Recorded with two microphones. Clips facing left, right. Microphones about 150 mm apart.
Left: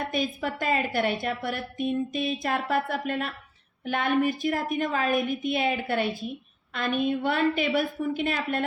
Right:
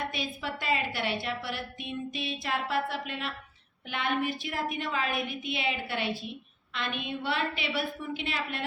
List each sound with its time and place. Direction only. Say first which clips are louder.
0.1 s a woman's voice: left 7 dB; 45° left (ahead or behind)